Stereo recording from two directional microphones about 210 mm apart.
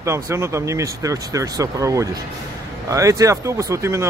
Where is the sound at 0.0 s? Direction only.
15° right (ahead or behind).